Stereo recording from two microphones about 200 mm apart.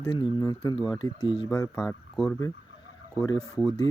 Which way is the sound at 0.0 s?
25° left (ahead or behind).